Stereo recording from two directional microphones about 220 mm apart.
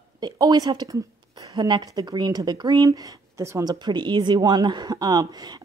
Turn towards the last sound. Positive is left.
turn(degrees=-20)  # may be behind; listen again after turning